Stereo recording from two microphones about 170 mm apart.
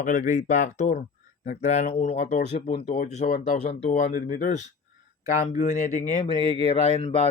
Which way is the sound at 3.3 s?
55° left (ahead or behind).